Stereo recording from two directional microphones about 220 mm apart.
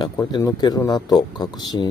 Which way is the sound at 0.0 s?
15° left (ahead or behind).